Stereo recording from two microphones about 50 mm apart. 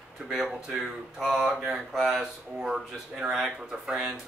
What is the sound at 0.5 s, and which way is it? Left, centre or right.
Speech, centre.